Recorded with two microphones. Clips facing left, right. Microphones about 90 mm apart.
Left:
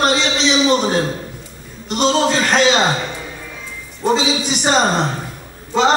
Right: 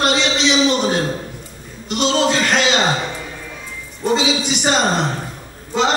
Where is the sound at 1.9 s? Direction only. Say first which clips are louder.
Left 1 dB; 40° left (ahead or behind).